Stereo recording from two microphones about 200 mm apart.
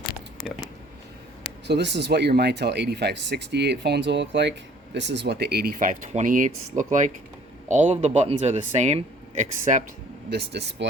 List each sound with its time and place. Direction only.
1.6 s speech: 60° right (ahead or behind); by 9.8 s 35° right (ahead or behind)
10.3 s speech: 60° right (ahead or behind)